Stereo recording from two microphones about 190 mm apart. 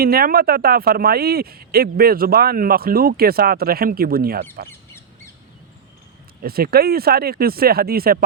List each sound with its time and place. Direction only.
0.0 s speech: 50° right (ahead or behind)
6.4 s speech: 50° right (ahead or behind)